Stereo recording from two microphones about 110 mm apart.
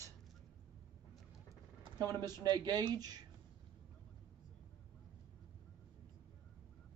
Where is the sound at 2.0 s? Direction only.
35° right (ahead or behind).